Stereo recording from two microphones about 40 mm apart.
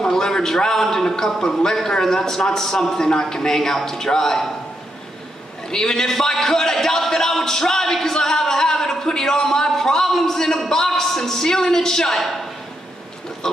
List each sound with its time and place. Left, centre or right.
0.0 s a man's voice: centre
5.7 s a man's voice: centre